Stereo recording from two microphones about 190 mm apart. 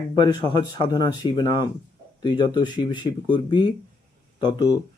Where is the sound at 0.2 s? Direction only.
25° left (ahead or behind).